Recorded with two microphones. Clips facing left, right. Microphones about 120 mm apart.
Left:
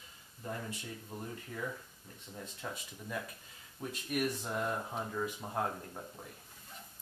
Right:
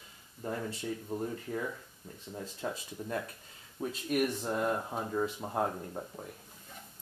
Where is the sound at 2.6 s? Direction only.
35° right (ahead or behind).